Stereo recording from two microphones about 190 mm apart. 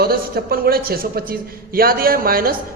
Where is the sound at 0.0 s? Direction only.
55° right (ahead or behind).